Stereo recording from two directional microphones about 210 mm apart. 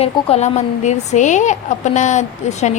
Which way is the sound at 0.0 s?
30° left (ahead or behind).